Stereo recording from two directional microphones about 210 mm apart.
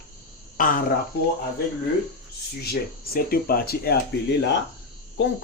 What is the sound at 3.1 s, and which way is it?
Speech, 45° left (ahead or behind).